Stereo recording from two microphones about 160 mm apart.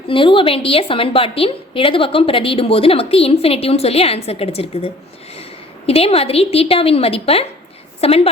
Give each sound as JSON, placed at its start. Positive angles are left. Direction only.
{"t": 0.1, "sound": "a woman's voice", "side_deg": 30}